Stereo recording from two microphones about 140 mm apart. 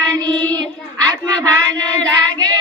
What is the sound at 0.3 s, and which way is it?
Child singing, 30° right (ahead or behind).